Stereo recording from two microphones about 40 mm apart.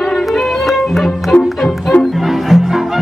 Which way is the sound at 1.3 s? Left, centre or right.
Left.